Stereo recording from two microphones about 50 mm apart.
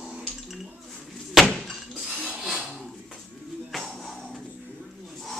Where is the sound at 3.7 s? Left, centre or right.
Centre.